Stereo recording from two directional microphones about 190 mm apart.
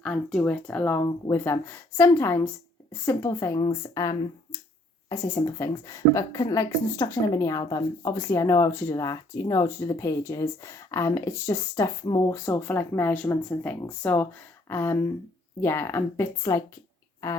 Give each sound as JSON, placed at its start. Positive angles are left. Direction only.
{"t": 0.0, "sound": "a woman's voice", "side_deg": 5}